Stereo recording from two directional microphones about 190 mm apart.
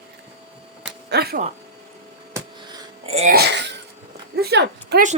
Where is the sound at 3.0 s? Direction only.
30° right (ahead or behind).